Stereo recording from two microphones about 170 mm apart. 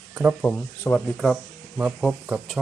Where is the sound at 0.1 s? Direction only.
5° right (ahead or behind).